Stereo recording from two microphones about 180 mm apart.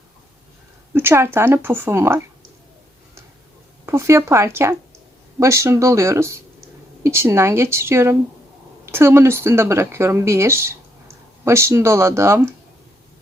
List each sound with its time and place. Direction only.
0.9 s speech: 15° right (ahead or behind)
3.8 s speech: 15° right (ahead or behind)